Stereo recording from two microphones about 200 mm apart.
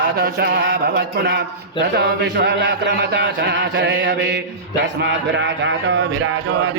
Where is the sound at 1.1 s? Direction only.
55° right (ahead or behind).